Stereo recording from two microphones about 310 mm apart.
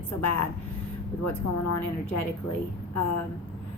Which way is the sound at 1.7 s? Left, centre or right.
Left.